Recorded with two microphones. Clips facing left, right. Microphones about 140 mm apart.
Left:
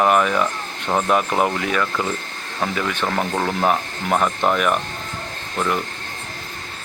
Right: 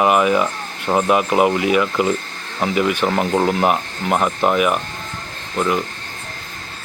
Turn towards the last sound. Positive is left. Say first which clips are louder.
# right 3 dB
turn(degrees=-5)  # may be behind; listen again after turning